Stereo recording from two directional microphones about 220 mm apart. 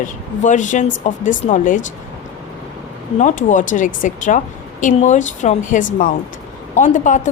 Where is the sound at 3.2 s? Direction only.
35° left (ahead or behind).